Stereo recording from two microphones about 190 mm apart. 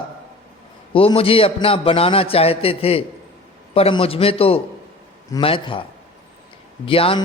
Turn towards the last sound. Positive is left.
turn(degrees=30)  # may be behind; listen again after turning